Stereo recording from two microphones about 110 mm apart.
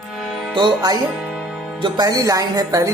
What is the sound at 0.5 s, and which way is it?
Speech, 40° right (ahead or behind).